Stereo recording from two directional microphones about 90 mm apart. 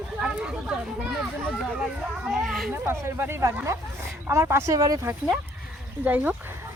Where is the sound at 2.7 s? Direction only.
30° right (ahead or behind).